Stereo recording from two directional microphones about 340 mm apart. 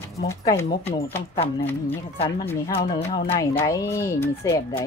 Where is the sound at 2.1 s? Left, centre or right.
Centre.